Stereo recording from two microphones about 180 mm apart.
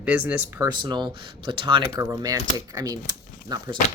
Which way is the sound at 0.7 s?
25° right (ahead or behind).